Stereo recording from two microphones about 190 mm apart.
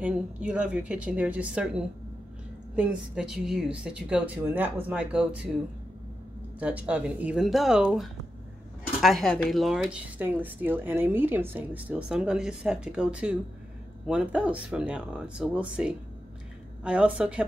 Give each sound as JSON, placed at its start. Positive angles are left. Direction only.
{"t": 0.0, "sound": "a woman's voice", "side_deg": -5}
{"t": 6.6, "sound": "a woman's voice", "side_deg": -5}